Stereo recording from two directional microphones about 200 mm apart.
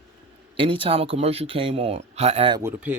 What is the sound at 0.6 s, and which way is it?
Speech, 25° right (ahead or behind).